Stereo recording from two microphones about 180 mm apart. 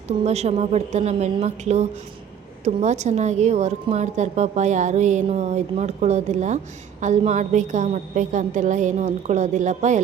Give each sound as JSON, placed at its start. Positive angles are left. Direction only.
{"t": 0.3, "sound": "a woman's voice", "side_deg": -35}